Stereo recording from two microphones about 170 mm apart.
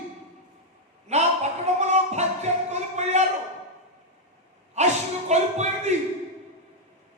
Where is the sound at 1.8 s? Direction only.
40° right (ahead or behind).